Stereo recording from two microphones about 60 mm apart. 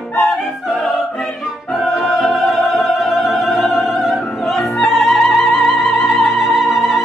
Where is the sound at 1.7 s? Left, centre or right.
Centre.